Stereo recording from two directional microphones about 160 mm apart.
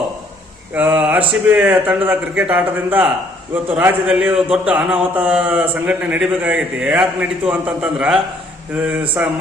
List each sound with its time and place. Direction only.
0.7 s a man's voice: 10° right (ahead or behind)